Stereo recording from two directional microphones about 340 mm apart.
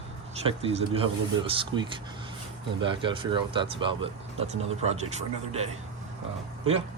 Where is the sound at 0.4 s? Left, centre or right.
Centre.